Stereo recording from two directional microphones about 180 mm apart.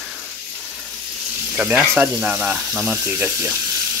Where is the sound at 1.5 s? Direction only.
10° right (ahead or behind).